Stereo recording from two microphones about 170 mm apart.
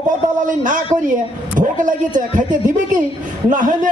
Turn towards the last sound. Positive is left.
turn(degrees=-50)  # may be behind; listen again after turning